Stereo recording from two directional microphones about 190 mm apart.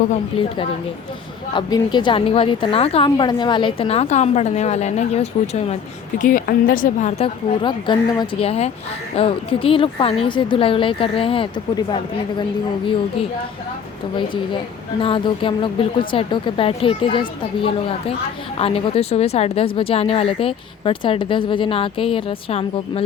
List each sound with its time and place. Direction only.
0.3 s speech: 25° left (ahead or behind)
6.1 s a woman's voice: 45° left (ahead or behind)
7.2 s speech: 25° left (ahead or behind)
15.0 s speech: 25° left (ahead or behind)